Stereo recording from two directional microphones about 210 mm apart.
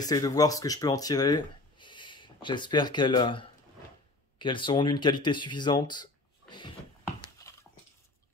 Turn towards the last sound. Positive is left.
turn(degrees=15)  # may be behind; listen again after turning